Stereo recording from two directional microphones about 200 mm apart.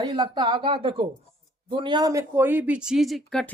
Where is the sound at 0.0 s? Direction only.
25° right (ahead or behind).